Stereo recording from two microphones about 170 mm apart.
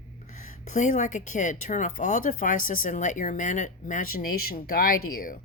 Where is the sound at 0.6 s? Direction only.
45° left (ahead or behind).